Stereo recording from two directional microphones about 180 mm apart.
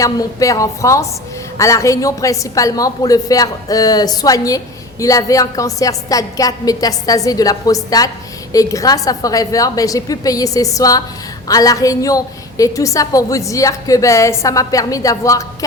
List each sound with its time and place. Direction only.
0.0 s a woman's voice: 20° left (ahead or behind)